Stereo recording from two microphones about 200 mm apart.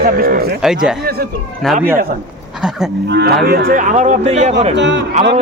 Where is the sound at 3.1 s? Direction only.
55° right (ahead or behind); by 4.5 s 35° right (ahead or behind).